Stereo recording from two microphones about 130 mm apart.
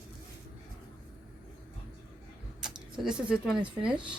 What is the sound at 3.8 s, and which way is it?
Speech, 10° right (ahead or behind).